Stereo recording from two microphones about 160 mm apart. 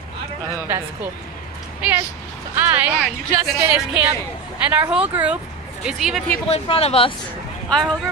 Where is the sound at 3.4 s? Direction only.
10° right (ahead or behind).